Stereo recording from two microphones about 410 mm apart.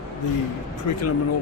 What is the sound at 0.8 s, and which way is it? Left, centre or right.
Speech, left.